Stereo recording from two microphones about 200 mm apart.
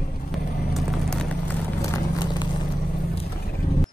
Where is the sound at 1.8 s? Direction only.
20° left (ahead or behind).